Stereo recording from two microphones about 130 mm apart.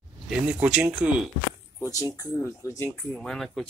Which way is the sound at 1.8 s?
25° left (ahead or behind).